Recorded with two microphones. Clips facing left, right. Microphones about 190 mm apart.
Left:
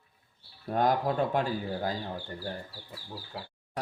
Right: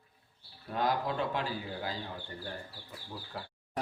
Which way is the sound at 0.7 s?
45° left (ahead or behind).